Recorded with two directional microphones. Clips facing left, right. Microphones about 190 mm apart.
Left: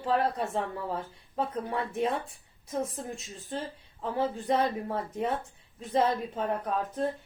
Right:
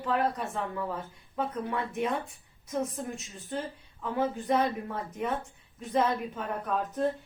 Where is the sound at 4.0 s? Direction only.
35° left (ahead or behind).